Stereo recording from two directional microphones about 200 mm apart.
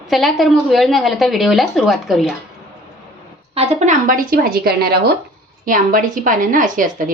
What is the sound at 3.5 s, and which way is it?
A woman's voice, 35° right (ahead or behind).